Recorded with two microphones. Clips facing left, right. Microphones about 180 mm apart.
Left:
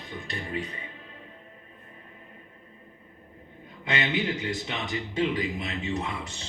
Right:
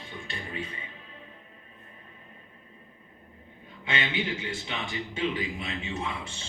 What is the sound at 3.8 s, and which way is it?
Speech, 40° left (ahead or behind).